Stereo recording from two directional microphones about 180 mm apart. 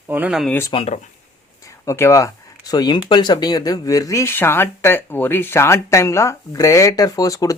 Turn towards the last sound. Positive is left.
turn(degrees=20)  # may be behind; listen again after turning